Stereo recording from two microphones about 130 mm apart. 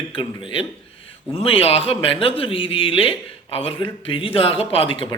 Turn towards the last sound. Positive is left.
turn(degrees=40)  # may be behind; listen again after turning